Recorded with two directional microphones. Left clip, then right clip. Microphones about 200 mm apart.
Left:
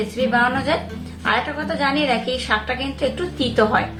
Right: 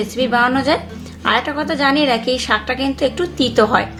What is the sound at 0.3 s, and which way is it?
A woman's voice, 40° right (ahead or behind).